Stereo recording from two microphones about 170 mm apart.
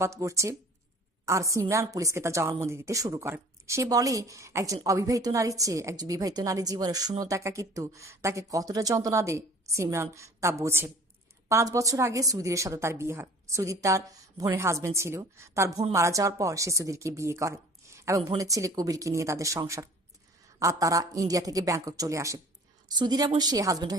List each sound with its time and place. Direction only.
0.0 s a woman's voice: 20° right (ahead or behind)